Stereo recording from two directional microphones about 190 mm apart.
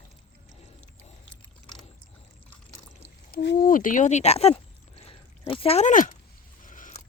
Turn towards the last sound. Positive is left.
turn(degrees=40)  # may be behind; listen again after turning